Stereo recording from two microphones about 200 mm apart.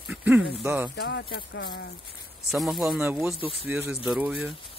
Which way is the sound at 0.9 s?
60° left (ahead or behind).